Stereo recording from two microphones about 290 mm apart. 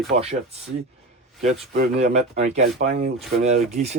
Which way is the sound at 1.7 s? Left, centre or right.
Right.